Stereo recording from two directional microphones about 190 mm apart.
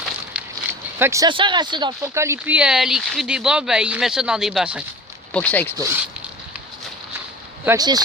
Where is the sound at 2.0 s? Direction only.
15° right (ahead or behind).